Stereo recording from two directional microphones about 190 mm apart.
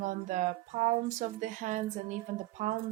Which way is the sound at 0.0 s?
40° right (ahead or behind).